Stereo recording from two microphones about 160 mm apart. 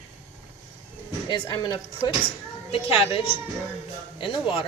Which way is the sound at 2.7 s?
35° left (ahead or behind).